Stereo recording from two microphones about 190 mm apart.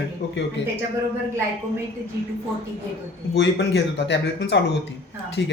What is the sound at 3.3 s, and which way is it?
Speech, 65° left (ahead or behind).